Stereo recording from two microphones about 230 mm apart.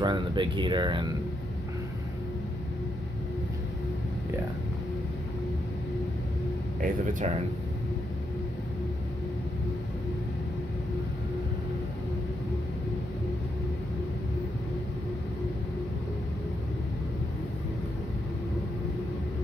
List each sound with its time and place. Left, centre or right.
0.0 s speech: centre
6.8 s speech: right